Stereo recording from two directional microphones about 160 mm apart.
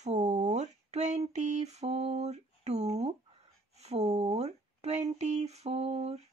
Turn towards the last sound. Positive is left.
turn(degrees=-40)  # may be behind; listen again after turning